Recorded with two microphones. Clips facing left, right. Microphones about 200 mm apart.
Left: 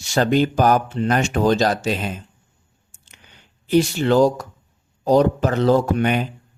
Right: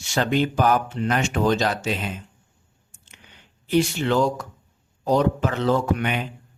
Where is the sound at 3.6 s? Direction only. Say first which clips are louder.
Left 4 dB; 40° left (ahead or behind).